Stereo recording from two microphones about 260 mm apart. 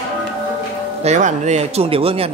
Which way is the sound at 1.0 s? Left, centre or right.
Right.